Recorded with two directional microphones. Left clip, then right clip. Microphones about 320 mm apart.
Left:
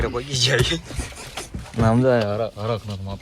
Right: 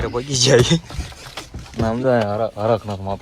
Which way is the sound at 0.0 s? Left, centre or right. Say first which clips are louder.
Right 3 dB; centre.